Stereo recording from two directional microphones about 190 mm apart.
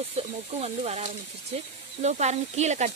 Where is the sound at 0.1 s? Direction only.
35° right (ahead or behind).